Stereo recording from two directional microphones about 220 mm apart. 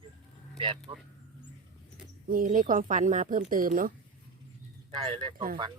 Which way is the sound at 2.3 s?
40° right (ahead or behind).